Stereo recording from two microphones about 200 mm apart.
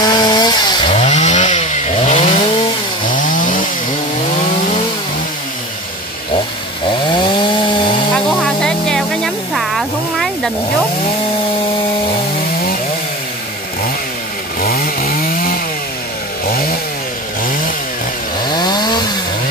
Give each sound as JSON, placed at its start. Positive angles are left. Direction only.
{"t": 0.0, "sound": "chainsaw", "side_deg": 20}
{"t": 0.8, "sound": "chainsaw", "side_deg": 35}
{"t": 8.3, "sound": "music", "side_deg": 5}
{"t": 14.6, "sound": "chainsaw", "side_deg": 45}
{"t": 18.5, "sound": "chainsaw", "side_deg": 20}